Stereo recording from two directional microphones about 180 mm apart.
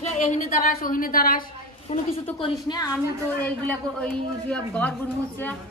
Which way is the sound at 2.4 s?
25° left (ahead or behind).